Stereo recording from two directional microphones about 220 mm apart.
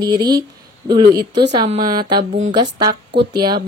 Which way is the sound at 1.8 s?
40° right (ahead or behind).